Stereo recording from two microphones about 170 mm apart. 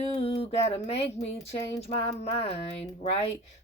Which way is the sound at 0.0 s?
35° left (ahead or behind).